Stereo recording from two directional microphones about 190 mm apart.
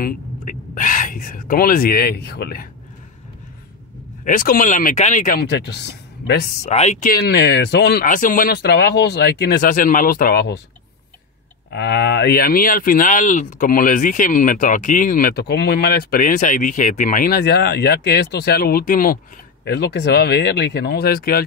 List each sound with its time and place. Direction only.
0.0 s speech: 45° left (ahead or behind)
4.2 s speech: 45° left (ahead or behind); by 6.5 s 60° left (ahead or behind)
6.6 s speech: 35° left (ahead or behind); by 10.6 s 55° left (ahead or behind)
11.7 s speech: 60° left (ahead or behind)
19.6 s speech: 60° left (ahead or behind)